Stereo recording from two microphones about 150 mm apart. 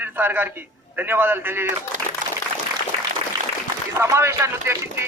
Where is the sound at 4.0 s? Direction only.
20° right (ahead or behind).